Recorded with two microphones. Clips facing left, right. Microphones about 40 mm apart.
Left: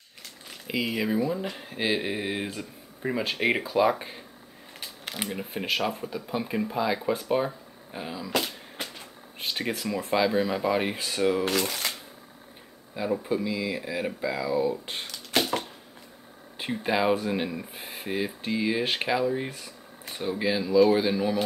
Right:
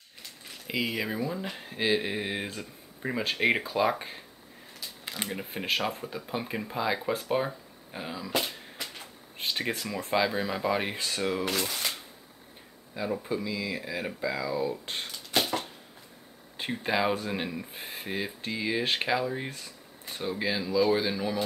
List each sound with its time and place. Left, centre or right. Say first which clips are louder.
0.7 s speech: left 3 dB; centre
4.7 s a sound: left 2 dB; left
5.3 s speech: left 1 dB; centre
9.4 s speech: left 1 dB; centre
11.4 s speech: left 4 dB; left
12.9 s speech: left 4 dB; centre
16.5 s speech: left 2 dB; centre